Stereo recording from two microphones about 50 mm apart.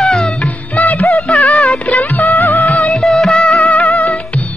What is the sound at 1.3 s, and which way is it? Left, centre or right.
Music, centre.